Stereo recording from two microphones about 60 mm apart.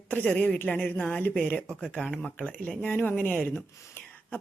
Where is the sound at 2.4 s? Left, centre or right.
Left.